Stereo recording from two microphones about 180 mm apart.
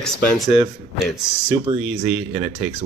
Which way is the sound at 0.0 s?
5° right (ahead or behind).